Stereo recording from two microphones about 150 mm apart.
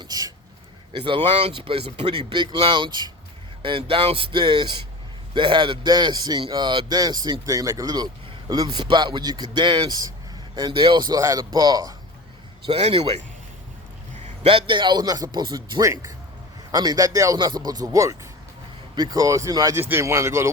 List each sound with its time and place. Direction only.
0.0 s a sound: 25° right (ahead or behind)
0.9 s speech: 35° right (ahead or behind)
12.6 s speech: 40° right (ahead or behind)
14.4 s speech: 35° right (ahead or behind); by 20.5 s 20° right (ahead or behind)